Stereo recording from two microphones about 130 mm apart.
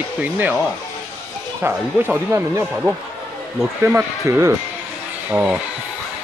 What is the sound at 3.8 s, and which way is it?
Speech, 15° right (ahead or behind).